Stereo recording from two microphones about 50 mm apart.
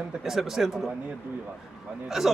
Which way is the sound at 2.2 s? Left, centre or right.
Centre.